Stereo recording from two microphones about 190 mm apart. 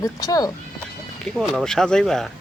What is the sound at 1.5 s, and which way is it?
Speech, centre (ahead or behind).